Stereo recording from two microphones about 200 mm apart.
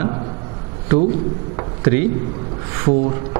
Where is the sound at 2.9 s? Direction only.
25° right (ahead or behind).